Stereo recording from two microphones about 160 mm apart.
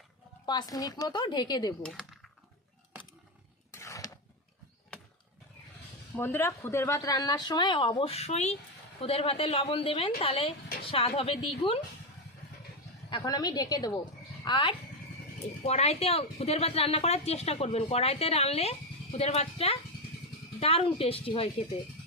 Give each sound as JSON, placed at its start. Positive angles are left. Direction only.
{"t": 0.4, "sound": "speech", "side_deg": 25}
{"t": 1.8, "sound": "speech", "side_deg": 0}
{"t": 3.7, "sound": "a sound", "side_deg": 20}
{"t": 6.1, "sound": "speech", "side_deg": 15}
{"t": 13.1, "sound": "a woman's voice", "side_deg": 25}
{"t": 15.6, "sound": "speech", "side_deg": 40}